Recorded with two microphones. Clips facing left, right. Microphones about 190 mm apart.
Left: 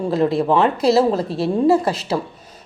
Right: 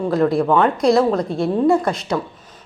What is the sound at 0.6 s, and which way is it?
Speech, 5° left (ahead or behind).